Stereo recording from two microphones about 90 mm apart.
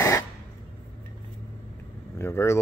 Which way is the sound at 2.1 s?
25° left (ahead or behind).